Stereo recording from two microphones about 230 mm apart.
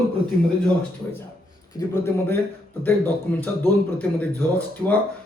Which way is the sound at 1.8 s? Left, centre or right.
Centre.